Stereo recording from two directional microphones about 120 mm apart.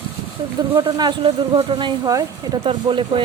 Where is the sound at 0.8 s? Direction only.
35° right (ahead or behind).